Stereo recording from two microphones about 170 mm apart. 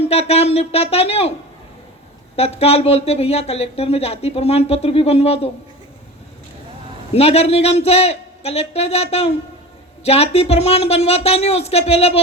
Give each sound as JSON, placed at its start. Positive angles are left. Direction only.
{"t": 0.0, "sound": "speech", "side_deg": 35}
{"t": 2.3, "sound": "speech", "side_deg": 35}
{"t": 7.1, "sound": "speech", "side_deg": 35}